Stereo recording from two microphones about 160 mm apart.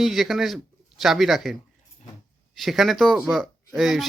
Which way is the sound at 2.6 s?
Centre (ahead or behind).